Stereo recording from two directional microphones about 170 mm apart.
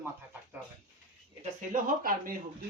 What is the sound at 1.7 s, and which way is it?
Speech, 55° right (ahead or behind).